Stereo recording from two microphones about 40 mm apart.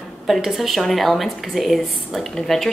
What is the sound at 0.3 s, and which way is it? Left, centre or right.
A woman's voice, centre.